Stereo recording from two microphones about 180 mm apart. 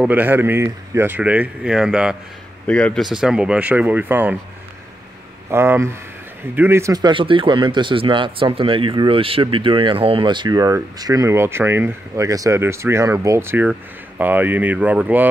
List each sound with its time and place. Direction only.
0.0 s speech: 10° right (ahead or behind)
5.5 s speech: 15° right (ahead or behind)